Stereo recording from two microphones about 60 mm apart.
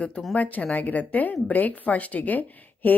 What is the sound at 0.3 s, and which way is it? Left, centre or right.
A woman's voice, left.